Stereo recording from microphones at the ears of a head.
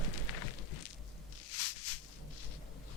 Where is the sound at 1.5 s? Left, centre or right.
Left.